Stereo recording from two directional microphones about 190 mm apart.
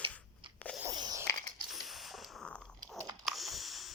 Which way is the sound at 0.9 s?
20° right (ahead or behind).